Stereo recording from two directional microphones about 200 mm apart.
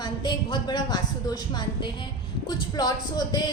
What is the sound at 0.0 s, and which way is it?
A woman's voice, 20° left (ahead or behind).